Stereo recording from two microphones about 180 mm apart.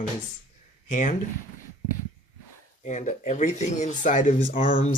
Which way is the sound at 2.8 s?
40° left (ahead or behind).